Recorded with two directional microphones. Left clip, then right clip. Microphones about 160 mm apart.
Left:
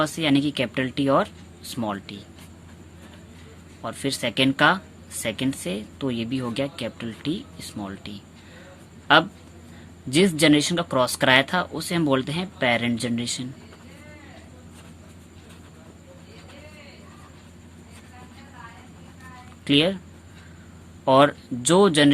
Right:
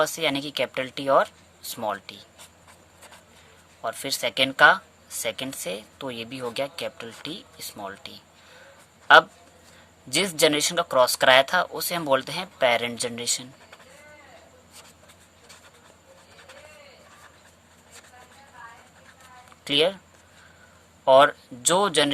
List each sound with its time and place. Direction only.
0.0 s speech: 35° right (ahead or behind)
3.8 s speech: 35° right (ahead or behind)
10.1 s speech: 40° right (ahead or behind)
19.6 s speech: 35° right (ahead or behind)
21.0 s speech: 30° right (ahead or behind)